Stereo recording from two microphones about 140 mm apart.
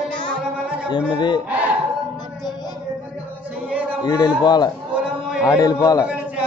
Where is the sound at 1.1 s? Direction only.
30° left (ahead or behind).